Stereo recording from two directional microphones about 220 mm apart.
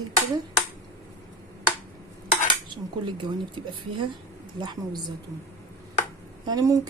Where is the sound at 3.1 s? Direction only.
20° right (ahead or behind).